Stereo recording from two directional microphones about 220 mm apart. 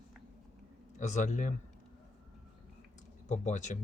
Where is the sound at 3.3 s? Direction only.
35° left (ahead or behind).